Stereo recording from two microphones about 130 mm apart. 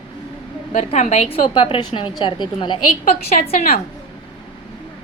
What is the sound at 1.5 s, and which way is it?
A woman's voice, 40° left (ahead or behind).